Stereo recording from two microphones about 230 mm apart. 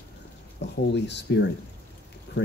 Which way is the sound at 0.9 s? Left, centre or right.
Left.